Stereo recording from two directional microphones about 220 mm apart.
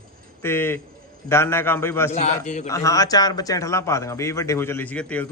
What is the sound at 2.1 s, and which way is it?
Speech, 30° left (ahead or behind).